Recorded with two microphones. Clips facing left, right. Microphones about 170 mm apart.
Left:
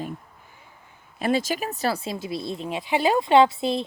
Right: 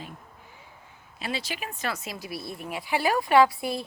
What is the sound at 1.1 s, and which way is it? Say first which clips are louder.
Speech: left 10 dB; 50° left (ahead or behind).